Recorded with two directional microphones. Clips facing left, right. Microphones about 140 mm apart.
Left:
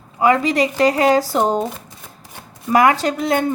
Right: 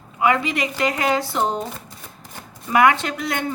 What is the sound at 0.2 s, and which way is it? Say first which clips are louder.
A woman's voice: left 5 dB; 35° left (ahead or behind).